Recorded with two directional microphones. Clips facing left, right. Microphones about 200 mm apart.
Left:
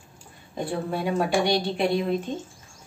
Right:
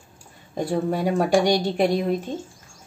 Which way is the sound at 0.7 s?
40° right (ahead or behind).